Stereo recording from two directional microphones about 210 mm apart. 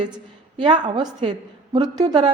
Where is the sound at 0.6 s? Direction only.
20° right (ahead or behind).